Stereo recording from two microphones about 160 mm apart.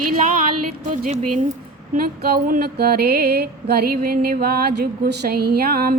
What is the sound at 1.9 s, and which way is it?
Music, 70° right (ahead or behind).